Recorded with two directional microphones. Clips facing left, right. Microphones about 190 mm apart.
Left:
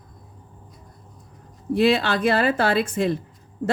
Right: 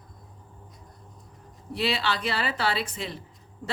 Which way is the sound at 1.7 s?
50° left (ahead or behind).